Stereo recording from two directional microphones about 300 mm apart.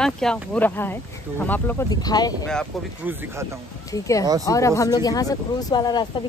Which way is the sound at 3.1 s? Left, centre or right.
Centre.